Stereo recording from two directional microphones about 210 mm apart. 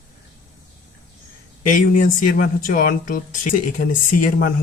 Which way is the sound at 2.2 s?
40° left (ahead or behind).